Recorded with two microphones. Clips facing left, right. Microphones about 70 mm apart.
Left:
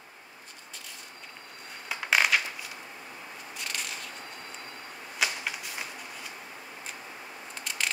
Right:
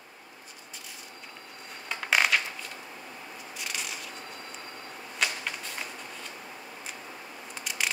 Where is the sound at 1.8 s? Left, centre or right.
Centre.